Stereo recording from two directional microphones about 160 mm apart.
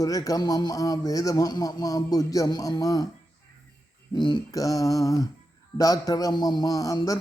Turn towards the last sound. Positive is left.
turn(degrees=20)  # may be behind; listen again after turning